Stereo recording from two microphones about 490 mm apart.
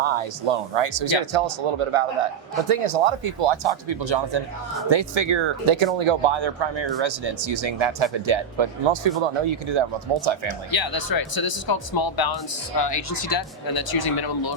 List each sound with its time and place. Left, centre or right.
0.0 s speech: right
10.7 s speech: left
12.9 s speech: left